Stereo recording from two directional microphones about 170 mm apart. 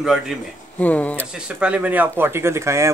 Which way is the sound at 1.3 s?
5° right (ahead or behind).